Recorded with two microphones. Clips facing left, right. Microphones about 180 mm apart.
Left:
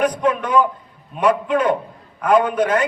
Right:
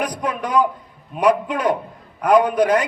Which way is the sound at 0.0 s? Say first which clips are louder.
Left 5 dB; 35° right (ahead or behind).